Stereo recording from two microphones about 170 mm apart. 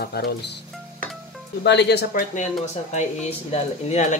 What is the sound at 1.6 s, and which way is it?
Speech, 85° left.